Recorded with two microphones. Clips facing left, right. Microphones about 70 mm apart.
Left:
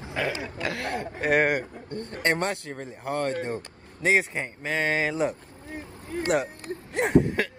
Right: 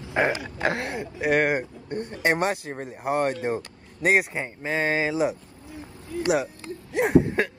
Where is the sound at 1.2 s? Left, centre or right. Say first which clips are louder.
Right 1 dB; centre.